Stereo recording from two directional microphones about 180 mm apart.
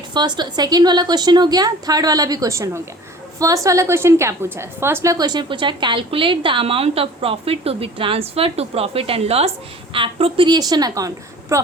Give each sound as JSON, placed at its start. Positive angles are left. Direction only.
{"t": 0.1, "sound": "a woman's voice", "side_deg": -25}